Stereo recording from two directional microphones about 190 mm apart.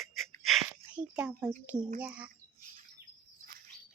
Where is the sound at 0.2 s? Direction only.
Centre (ahead or behind).